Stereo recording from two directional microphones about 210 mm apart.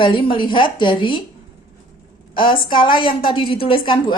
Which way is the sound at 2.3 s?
25° left (ahead or behind).